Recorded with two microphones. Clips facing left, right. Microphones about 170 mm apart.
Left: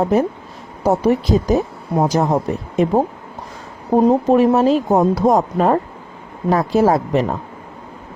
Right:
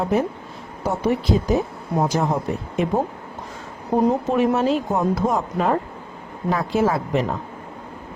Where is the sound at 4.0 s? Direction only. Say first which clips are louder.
Left 6 dB; 35° left (ahead or behind).